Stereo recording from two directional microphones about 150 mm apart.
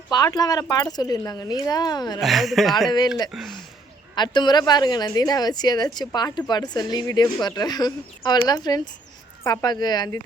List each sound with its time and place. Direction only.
0.1 s speech: 25° left (ahead or behind)
2.1 s a woman's voice: centre (ahead or behind)
4.1 s speech: 30° left (ahead or behind)